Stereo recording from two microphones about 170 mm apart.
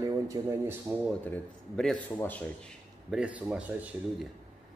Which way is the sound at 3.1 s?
5° right (ahead or behind).